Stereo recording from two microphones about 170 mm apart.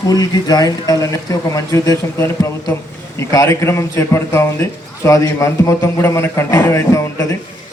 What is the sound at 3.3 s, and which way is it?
A man's voice, 15° left (ahead or behind).